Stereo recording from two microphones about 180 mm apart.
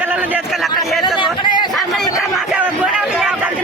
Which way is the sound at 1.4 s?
25° left (ahead or behind).